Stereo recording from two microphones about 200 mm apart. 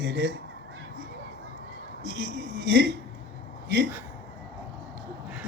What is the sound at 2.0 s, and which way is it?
Speech, 50° right (ahead or behind).